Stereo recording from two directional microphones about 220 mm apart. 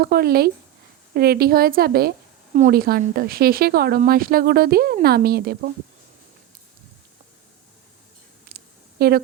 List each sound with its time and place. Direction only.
0.0 s speech: 45° right (ahead or behind)
9.0 s a woman's voice: 45° right (ahead or behind)